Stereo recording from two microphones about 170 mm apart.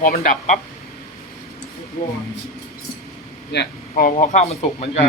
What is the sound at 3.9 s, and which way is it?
Speech, 50° left (ahead or behind).